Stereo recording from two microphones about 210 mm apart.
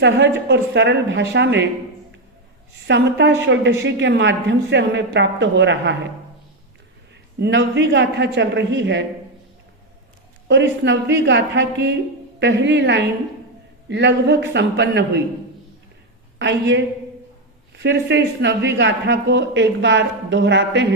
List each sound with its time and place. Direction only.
0.4 s speech: 55° right (ahead or behind)
2.8 s speech: 55° right (ahead or behind)
7.3 s speech: 55° right (ahead or behind)
10.5 s speech: 55° right (ahead or behind)
16.4 s speech: 55° right (ahead or behind)
17.8 s speech: 55° right (ahead or behind)